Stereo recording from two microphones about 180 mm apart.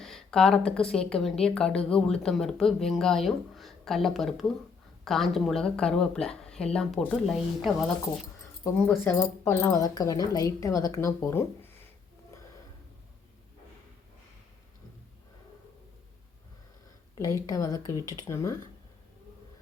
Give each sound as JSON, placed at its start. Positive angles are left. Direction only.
{"t": 0.0, "sound": "speech", "side_deg": 0}
{"t": 8.6, "sound": "speech", "side_deg": 15}
{"t": 17.2, "sound": "speech", "side_deg": 20}